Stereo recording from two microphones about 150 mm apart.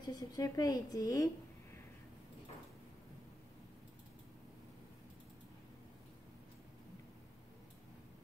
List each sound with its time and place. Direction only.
0.0 s a woman's voice: 25° left (ahead or behind)